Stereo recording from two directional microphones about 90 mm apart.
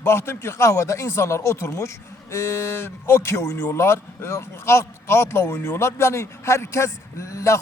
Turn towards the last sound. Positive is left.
turn(degrees=35)  # may be behind; listen again after turning